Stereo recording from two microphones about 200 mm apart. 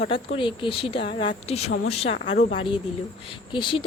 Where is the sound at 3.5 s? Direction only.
25° left (ahead or behind).